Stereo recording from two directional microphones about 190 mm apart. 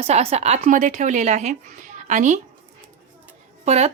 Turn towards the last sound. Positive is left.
turn(degrees=-35)  # may be behind; listen again after turning